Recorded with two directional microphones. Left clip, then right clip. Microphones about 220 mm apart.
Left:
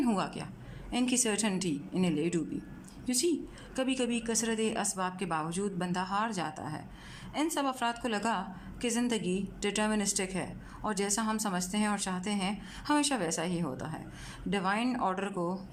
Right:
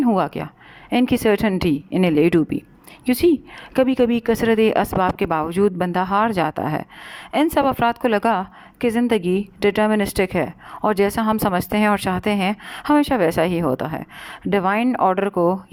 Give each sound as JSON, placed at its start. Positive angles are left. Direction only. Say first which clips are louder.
{"t": 0.0, "sound": "a woman's voice", "louder": "right 13 dB", "side_deg": -35}